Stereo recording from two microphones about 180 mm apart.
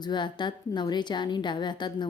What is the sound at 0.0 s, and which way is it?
Speech, 25° left (ahead or behind).